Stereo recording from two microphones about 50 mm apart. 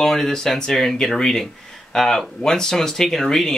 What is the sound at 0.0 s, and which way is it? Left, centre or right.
Speech, centre.